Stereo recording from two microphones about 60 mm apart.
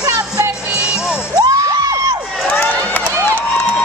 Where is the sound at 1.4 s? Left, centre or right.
Right.